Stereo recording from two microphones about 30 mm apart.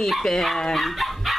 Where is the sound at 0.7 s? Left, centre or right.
Centre.